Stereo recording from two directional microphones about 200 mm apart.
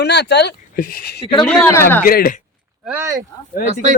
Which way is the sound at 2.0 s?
45° left (ahead or behind).